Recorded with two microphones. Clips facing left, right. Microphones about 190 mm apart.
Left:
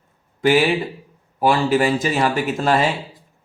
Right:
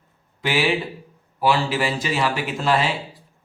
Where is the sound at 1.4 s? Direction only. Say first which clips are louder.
Left 4 dB; 50° left (ahead or behind).